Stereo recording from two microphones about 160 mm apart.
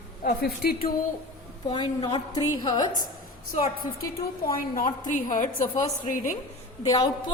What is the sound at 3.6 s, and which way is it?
A woman's voice, 65° left (ahead or behind).